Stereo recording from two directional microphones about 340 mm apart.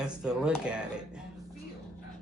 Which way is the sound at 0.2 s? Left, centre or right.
Centre.